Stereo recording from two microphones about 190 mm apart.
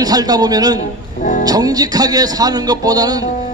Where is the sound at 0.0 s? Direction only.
20° right (ahead or behind).